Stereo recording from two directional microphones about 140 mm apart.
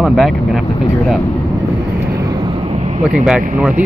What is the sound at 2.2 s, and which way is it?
Vehicle, 30° right (ahead or behind).